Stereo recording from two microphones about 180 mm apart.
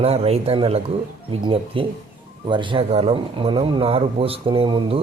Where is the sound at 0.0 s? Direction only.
35° right (ahead or behind).